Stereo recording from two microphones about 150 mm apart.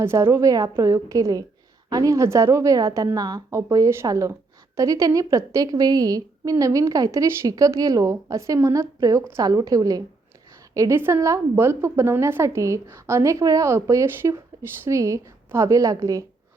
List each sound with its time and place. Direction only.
0.0 s a woman's voice: 15° right (ahead or behind)